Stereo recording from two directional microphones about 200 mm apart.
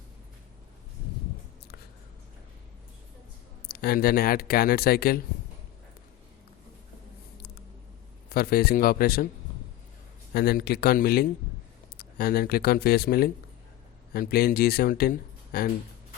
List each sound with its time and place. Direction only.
3.7 s speech: 50° left (ahead or behind)
8.3 s speech: 50° left (ahead or behind)
10.3 s speech: 50° left (ahead or behind)